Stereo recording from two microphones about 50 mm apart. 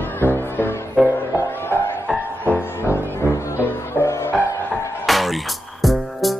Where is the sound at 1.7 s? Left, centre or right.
Left.